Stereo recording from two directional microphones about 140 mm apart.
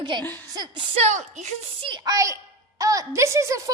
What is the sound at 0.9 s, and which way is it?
Speech, 55° right (ahead or behind).